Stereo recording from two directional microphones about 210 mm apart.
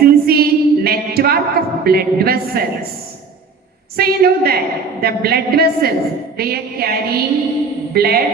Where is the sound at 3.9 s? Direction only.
45° right (ahead or behind).